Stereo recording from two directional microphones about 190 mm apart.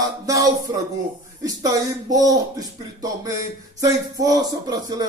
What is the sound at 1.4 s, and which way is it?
Speech, 20° right (ahead or behind).